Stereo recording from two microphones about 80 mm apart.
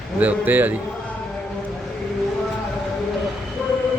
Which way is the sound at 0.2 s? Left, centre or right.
Right.